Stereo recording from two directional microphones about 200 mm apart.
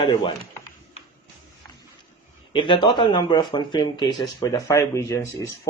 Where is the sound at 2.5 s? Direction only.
25° left (ahead or behind).